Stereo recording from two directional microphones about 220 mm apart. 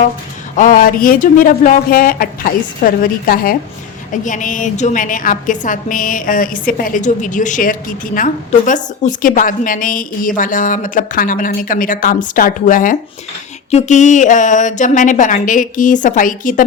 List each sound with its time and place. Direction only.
0.5 s a woman's voice: 35° left (ahead or behind)